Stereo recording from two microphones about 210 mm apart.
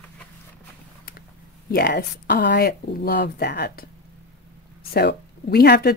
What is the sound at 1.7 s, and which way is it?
Speech, 45° left (ahead or behind).